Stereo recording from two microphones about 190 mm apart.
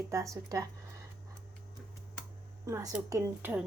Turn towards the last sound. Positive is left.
turn(degrees=-15)  # may be behind; listen again after turning